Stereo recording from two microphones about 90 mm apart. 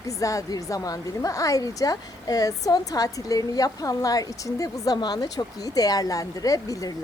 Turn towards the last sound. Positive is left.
turn(degrees=40)  # may be behind; listen again after turning